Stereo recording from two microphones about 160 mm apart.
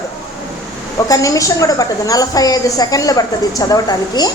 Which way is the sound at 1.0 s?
20° left (ahead or behind).